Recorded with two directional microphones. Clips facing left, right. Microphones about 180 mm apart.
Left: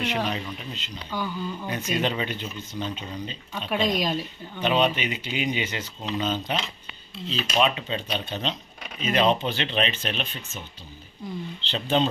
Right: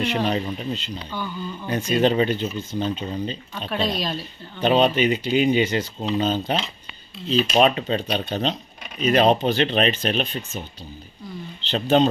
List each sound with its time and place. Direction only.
0.3 s speech: 35° right (ahead or behind)
1.1 s speech: 10° left (ahead or behind)
1.7 s speech: 35° right (ahead or behind)
3.7 s speech: 15° left (ahead or behind)
4.6 s speech: 35° right (ahead or behind)
7.2 s speech: 45° right (ahead or behind)
11.6 s speech: 45° right (ahead or behind)